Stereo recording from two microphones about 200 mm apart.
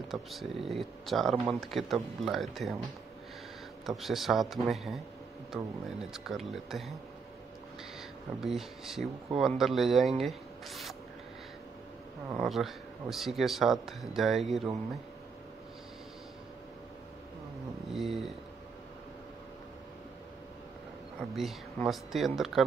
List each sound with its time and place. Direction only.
0.1 s speech: centre (ahead or behind)
3.8 s speech: centre (ahead or behind)
8.4 s speech: centre (ahead or behind)
12.3 s speech: 5° right (ahead or behind)
17.9 s a sound: centre (ahead or behind)
21.4 s speech: centre (ahead or behind)